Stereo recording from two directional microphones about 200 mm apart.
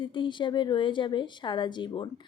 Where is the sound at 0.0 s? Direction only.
25° left (ahead or behind).